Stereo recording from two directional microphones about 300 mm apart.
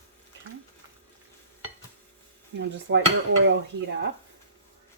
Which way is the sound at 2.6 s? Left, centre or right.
Right.